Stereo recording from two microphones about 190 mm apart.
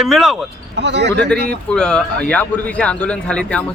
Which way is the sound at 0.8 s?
65° right (ahead or behind).